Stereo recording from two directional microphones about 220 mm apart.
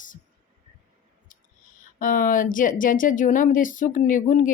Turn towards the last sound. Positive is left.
turn(degrees=35)  # may be behind; listen again after turning